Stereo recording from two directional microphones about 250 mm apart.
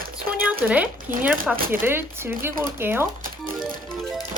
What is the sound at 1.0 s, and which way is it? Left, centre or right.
Speech, right.